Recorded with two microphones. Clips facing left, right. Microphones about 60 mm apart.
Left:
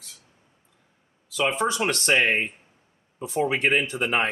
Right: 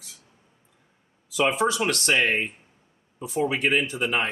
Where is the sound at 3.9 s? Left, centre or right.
Centre.